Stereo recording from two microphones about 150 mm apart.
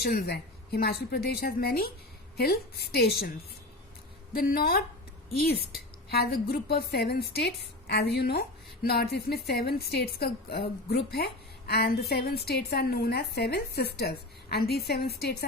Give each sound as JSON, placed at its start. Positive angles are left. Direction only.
{"t": 0.0, "sound": "a woman's voice", "side_deg": 90}
{"t": 4.3, "sound": "a woman's voice", "side_deg": 75}
{"t": 5.3, "sound": "a woman's voice", "side_deg": 90}